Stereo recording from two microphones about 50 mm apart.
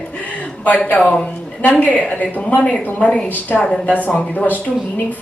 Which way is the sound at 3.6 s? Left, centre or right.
Centre.